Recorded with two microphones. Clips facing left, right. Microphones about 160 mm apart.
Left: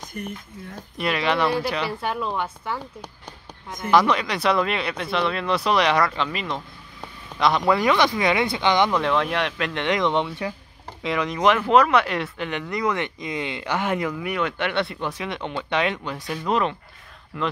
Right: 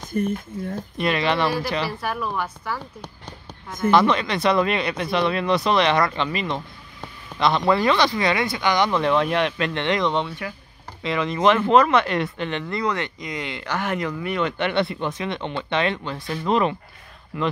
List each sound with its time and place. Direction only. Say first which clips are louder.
0.1 s speech: right 10 dB; 35° right (ahead or behind)
0.9 s speech: right 1 dB; 5° left (ahead or behind)
1.9 s a woman's voice: left 1 dB; 25° left (ahead or behind)
4.1 s speech: right 1 dB; 10° left (ahead or behind)
8.9 s speech: right 2 dB; 5° right (ahead or behind)
9.8 s speech: left 2 dB; 15° left (ahead or behind)
14.1 s speech: right 1 dB; 5° left (ahead or behind)